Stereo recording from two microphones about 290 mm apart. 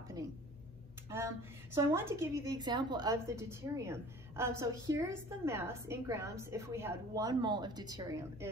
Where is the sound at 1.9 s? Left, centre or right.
Centre.